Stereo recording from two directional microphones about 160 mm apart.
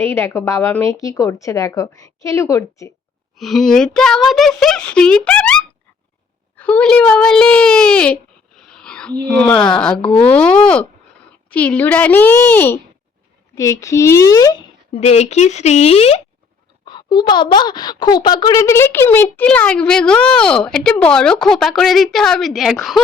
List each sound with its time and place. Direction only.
0.0 s a woman's voice: 15° left (ahead or behind)
3.3 s a child's voice: centre (ahead or behind)
10.0 s speech: 35° left (ahead or behind)
10.2 s a woman's voice: 5° left (ahead or behind); by 14.6 s 20° left (ahead or behind)
14.9 s speech: 40° left (ahead or behind)
16.8 s speech: 30° left (ahead or behind); by 23.0 s centre (ahead or behind)